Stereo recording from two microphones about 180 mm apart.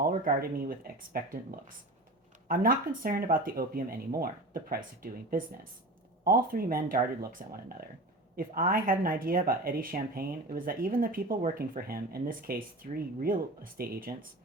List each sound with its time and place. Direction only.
0.3 s speech: 55° right (ahead or behind)